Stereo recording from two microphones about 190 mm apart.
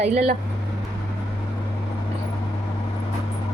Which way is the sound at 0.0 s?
35° right (ahead or behind).